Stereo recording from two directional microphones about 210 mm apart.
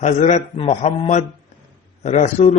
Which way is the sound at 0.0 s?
30° left (ahead or behind).